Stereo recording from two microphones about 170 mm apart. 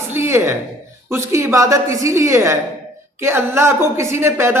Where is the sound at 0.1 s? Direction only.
15° right (ahead or behind).